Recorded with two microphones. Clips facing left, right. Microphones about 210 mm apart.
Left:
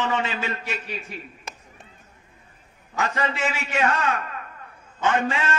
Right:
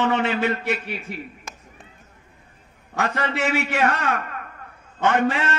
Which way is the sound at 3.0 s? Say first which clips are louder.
Right 2 dB; 65° right (ahead or behind).